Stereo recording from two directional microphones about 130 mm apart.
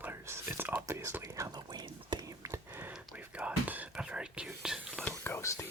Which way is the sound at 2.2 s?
25° right (ahead or behind).